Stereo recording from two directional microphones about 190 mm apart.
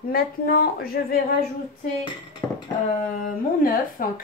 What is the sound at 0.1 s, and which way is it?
A woman's voice, 50° left (ahead or behind).